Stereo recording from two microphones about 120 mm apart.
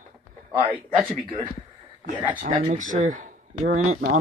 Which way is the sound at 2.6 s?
90° right.